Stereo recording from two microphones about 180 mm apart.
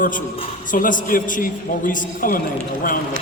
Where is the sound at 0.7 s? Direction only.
50° left (ahead or behind).